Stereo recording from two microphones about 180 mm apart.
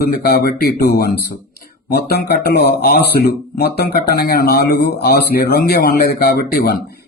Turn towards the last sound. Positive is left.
turn(degrees=55)  # may be behind; listen again after turning